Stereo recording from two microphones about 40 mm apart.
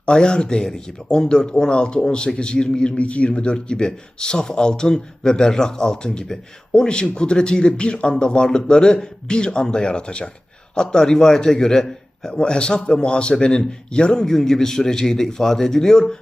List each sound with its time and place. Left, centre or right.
0.0 s a man's voice: centre